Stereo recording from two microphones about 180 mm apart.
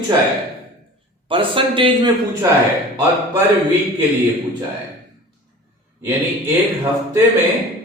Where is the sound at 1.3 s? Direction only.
30° right (ahead or behind).